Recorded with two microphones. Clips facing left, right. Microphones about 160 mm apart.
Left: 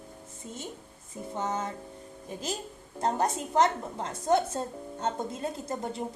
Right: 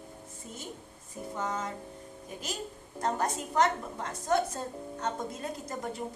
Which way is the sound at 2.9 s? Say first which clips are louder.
Left 3 dB; 25° left (ahead or behind).